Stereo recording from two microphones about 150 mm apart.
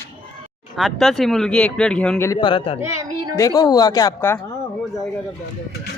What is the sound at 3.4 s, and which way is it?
Speech, 25° left (ahead or behind).